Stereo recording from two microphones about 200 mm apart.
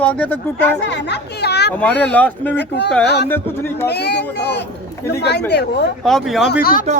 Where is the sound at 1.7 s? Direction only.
5° left (ahead or behind).